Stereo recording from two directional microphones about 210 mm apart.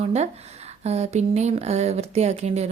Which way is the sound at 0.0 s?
30° right (ahead or behind).